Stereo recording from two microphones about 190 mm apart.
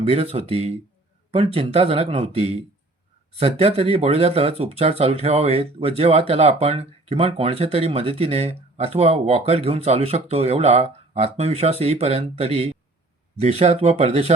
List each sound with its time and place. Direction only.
0.0 s speech: 30° right (ahead or behind)